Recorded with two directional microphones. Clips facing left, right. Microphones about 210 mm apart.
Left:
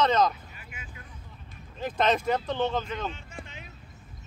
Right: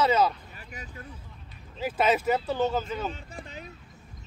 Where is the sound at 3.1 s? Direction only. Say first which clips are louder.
Right 3 dB; 35° right (ahead or behind).